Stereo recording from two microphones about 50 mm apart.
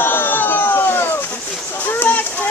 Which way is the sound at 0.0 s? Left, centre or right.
Left.